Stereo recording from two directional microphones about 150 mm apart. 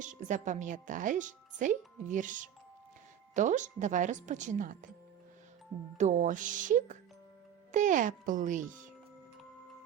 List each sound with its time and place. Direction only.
0.0 s speech: 55° right (ahead or behind)
6.0 s speech: 55° right (ahead or behind)